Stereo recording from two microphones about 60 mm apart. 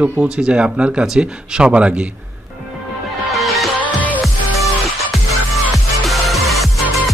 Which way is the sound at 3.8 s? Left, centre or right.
Left.